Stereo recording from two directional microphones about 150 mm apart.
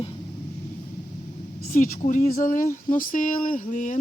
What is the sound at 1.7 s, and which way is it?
Speech, 60° left (ahead or behind).